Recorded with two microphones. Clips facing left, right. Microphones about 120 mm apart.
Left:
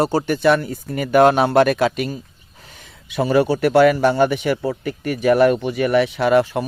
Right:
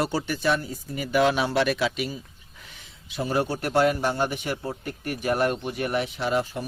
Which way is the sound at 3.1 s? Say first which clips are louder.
Left 9 dB; 85° left.